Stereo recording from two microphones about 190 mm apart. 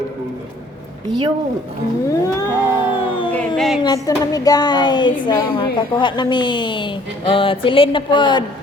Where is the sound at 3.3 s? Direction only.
5° left (ahead or behind).